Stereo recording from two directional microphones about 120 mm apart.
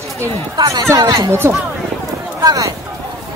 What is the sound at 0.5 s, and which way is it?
A woman's voice, 30° right (ahead or behind).